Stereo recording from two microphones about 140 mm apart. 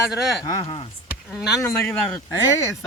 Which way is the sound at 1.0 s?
5° right (ahead or behind).